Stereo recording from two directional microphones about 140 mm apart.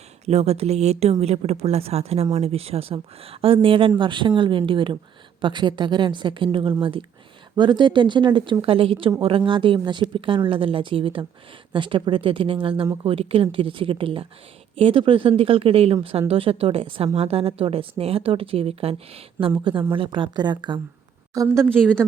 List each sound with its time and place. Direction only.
0.3 s a woman's voice: 50° right (ahead or behind); by 20.8 s 35° right (ahead or behind)
21.4 s speech: 15° right (ahead or behind)